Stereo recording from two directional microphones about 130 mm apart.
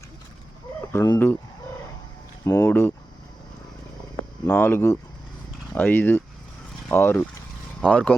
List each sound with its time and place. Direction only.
1.0 s speech: 20° left (ahead or behind)
2.4 s speech: 25° left (ahead or behind)
4.4 s speech: 15° left (ahead or behind)